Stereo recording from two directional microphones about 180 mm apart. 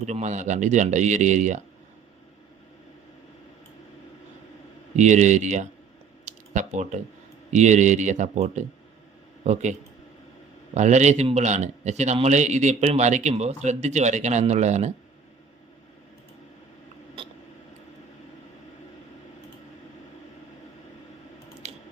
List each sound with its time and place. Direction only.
0.0 s speech: 40° right (ahead or behind)
4.9 s speech: 40° right (ahead or behind)
6.2 s a sound: 40° right (ahead or behind)
7.5 s speech: 40° right (ahead or behind)
10.8 s speech: 40° right (ahead or behind)
21.6 s a sound: 35° right (ahead or behind)